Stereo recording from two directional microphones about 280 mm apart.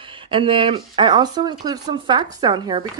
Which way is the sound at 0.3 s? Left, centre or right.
Centre.